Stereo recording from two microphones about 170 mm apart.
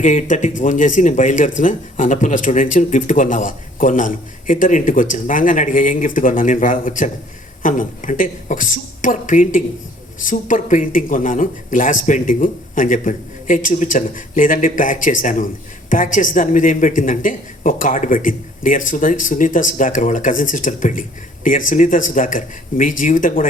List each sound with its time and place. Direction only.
0.0 s a woman's voice: 45° left (ahead or behind)